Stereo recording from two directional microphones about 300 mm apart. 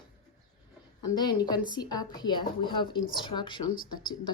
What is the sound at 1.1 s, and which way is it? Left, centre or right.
Speech, centre.